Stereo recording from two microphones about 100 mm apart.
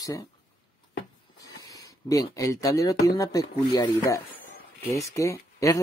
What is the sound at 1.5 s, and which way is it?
Speech, 35° left (ahead or behind).